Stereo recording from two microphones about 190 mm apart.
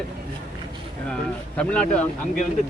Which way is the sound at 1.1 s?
5° left (ahead or behind).